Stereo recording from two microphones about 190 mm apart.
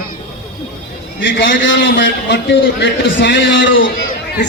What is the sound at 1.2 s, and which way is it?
A man's voice, 75° left (ahead or behind).